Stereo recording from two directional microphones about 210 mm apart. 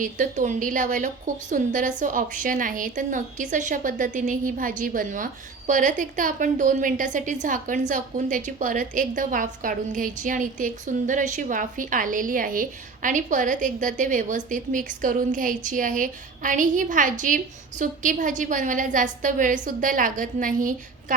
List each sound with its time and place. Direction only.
0.0 s a woman's voice: 40° right (ahead or behind)